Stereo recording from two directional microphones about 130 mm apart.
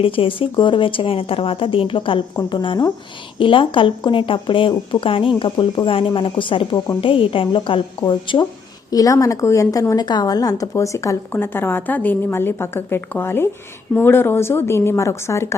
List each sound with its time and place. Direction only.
0.0 s a woman's voice: 45° left (ahead or behind); by 15.5 s 20° left (ahead or behind)